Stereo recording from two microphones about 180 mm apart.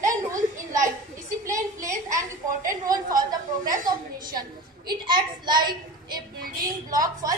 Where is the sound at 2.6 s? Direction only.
50° right (ahead or behind).